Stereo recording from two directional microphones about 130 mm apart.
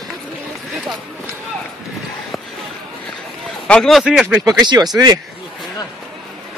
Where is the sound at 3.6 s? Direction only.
5° left (ahead or behind).